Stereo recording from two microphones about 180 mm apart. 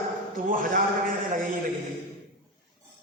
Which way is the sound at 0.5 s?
50° right (ahead or behind).